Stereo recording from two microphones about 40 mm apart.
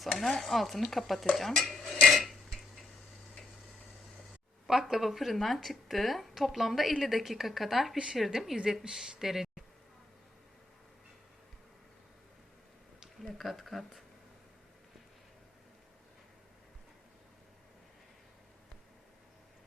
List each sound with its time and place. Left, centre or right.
0.0 s a woman's voice: centre
2.0 s dishes: centre
4.6 s a woman's voice: centre
7.9 s speech: centre
8.2 s a woman's voice: centre
8.8 s speech: centre
13.1 s a woman's voice: centre